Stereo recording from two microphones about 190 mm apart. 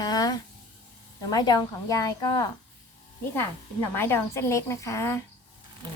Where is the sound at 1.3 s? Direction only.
20° left (ahead or behind).